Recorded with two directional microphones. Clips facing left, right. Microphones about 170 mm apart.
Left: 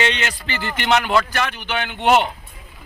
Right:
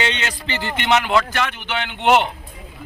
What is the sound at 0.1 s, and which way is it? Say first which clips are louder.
Speech: even; 20° right (ahead or behind).